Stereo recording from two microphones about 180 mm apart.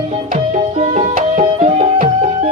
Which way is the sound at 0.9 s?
40° right (ahead or behind).